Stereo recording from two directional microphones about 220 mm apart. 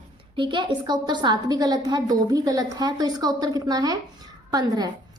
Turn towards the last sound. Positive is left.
turn(degrees=-20)  # may be behind; listen again after turning